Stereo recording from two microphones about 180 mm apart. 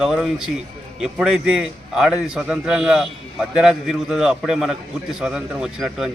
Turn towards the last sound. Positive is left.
turn(degrees=0)  # may be behind; listen again after turning